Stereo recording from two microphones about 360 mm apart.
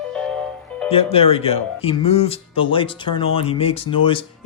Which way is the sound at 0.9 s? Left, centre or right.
Centre.